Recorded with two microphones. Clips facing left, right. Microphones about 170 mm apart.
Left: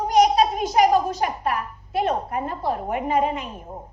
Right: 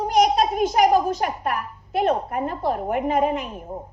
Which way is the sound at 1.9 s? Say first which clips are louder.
Right 2 dB; 55° right (ahead or behind).